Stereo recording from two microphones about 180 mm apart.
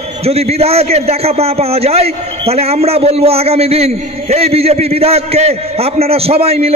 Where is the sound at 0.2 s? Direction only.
35° right (ahead or behind).